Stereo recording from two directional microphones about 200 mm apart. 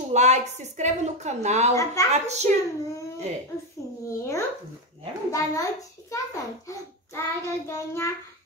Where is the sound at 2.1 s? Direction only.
35° right (ahead or behind).